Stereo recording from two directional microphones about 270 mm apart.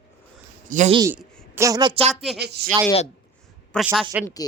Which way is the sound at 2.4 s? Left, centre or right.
Right.